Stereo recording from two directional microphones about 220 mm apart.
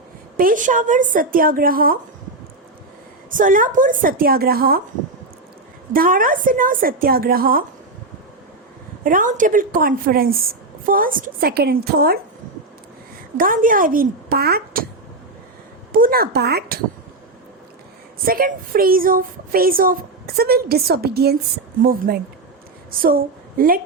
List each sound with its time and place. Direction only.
0.3 s speech: 40° right (ahead or behind)
3.3 s speech: 40° right (ahead or behind)
5.9 s speech: 40° right (ahead or behind)
9.0 s a woman's voice: 35° right (ahead or behind)
13.3 s speech: 40° right (ahead or behind)
15.9 s a woman's voice: 40° right (ahead or behind)
18.3 s a woman's voice: 40° right (ahead or behind)